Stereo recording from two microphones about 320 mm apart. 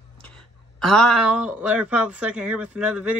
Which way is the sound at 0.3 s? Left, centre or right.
Centre.